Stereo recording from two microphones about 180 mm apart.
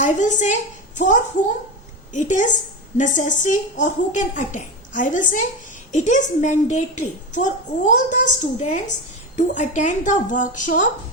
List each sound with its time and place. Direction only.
0.0 s a woman's voice: 40° left (ahead or behind)